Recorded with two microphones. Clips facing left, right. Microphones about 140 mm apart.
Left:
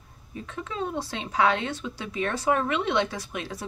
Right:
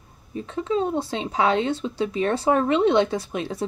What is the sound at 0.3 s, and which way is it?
Speech, 30° right (ahead or behind).